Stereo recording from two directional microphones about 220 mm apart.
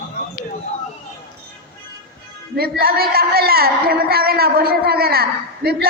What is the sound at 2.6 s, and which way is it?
A man's voice, 45° right (ahead or behind).